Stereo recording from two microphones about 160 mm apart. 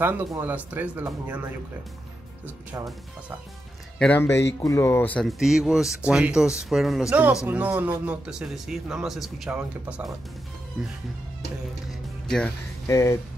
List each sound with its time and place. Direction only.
0.0 s speech: 15° right (ahead or behind)
4.0 s speech: 10° left (ahead or behind)
5.2 s speech: centre (ahead or behind)
11.9 s music: 5° left (ahead or behind)
12.8 s speech: 20° left (ahead or behind)